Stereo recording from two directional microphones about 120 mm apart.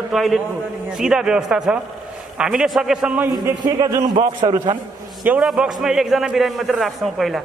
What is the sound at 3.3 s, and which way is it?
A man's voice, 30° right (ahead or behind).